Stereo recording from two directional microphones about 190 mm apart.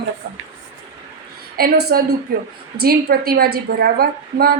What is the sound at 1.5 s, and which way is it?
A woman's voice, 55° right (ahead or behind).